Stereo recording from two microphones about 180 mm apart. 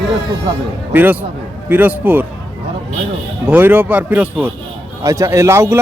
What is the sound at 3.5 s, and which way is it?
Speech, 10° right (ahead or behind).